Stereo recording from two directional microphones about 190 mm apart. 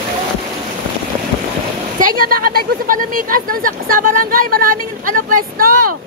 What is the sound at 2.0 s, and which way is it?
Speech, 50° right (ahead or behind).